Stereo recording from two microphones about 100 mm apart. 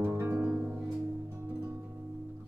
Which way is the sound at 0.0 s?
25° right (ahead or behind).